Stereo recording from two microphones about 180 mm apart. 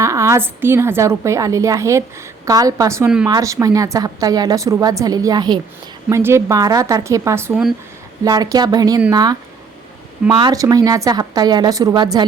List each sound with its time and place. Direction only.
0.0 s a woman's voice: 15° right (ahead or behind)